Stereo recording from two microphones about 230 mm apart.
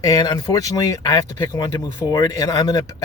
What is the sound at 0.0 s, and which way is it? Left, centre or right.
Speech, centre.